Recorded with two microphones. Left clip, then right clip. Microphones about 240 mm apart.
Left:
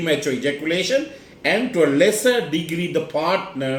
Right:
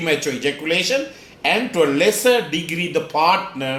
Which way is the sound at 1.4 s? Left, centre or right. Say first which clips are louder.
Right 1 dB; right.